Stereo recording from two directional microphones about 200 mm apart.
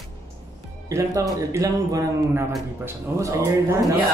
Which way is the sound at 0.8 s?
15° right (ahead or behind).